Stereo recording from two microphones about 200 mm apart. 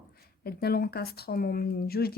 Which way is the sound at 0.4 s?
50° left (ahead or behind).